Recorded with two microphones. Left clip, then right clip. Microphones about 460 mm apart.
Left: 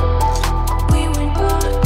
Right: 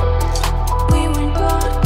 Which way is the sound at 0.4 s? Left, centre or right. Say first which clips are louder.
Right 1 dB; centre.